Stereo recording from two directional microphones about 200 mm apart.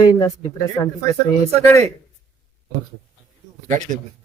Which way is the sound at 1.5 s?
35° right (ahead or behind).